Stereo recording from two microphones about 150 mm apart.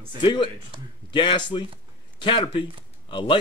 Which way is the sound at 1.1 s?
30° left (ahead or behind).